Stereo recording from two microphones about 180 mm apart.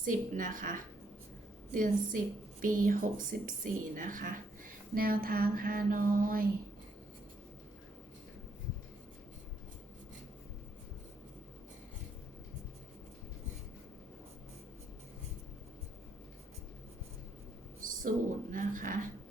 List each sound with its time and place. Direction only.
0.0 s a woman's voice: 45° right (ahead or behind)
17.7 s a sound: 50° right (ahead or behind)
18.5 s a woman's voice: 45° right (ahead or behind)